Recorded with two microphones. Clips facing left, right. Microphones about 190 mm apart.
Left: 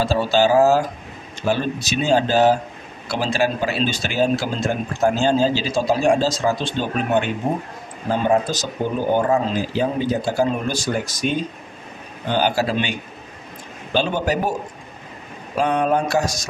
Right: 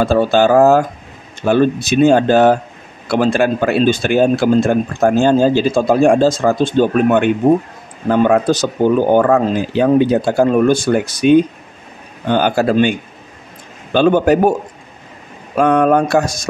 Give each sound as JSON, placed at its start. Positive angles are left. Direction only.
{"t": 0.0, "sound": "speech", "side_deg": -55}
{"t": 13.9, "sound": "speech", "side_deg": -55}
{"t": 15.5, "sound": "speech", "side_deg": -55}